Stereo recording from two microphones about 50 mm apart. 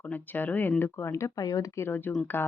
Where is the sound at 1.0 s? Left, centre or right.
Left.